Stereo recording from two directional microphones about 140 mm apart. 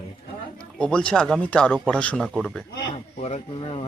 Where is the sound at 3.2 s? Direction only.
50° left (ahead or behind).